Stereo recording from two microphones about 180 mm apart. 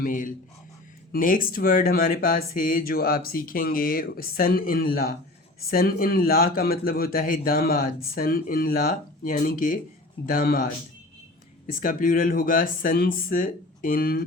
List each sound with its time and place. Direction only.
0.0 s speech: 50° left (ahead or behind)